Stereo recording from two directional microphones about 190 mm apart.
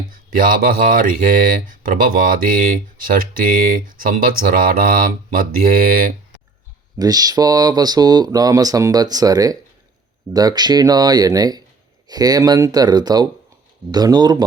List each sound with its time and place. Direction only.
0.3 s speech: 45° right (ahead or behind)
7.0 s speech: 20° right (ahead or behind)